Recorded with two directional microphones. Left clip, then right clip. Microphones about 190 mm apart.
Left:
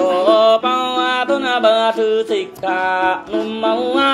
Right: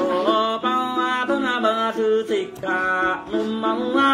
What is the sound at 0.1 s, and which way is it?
Music, 15° right (ahead or behind).